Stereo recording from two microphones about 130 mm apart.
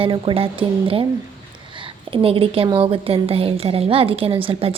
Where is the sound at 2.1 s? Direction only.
45° right (ahead or behind).